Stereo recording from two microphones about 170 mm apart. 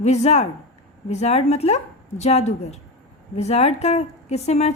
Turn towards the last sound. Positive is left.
turn(degrees=40)  # may be behind; listen again after turning